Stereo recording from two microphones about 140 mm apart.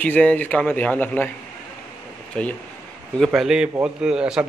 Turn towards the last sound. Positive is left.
turn(degrees=-5)  # may be behind; listen again after turning